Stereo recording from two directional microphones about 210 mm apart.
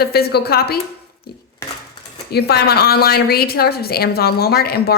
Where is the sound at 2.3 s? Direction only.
50° left (ahead or behind).